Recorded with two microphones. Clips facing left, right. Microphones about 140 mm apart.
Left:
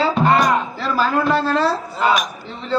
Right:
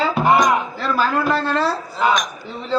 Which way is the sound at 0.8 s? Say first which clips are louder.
Left 1 dB; centre (ahead or behind).